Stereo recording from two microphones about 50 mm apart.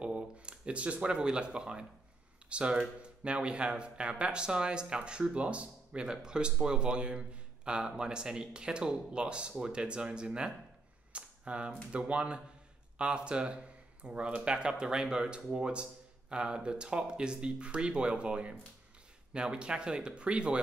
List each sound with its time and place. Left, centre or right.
0.0 s speech: right